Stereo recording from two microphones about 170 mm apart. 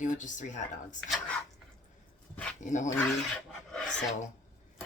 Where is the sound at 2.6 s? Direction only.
45° left (ahead or behind).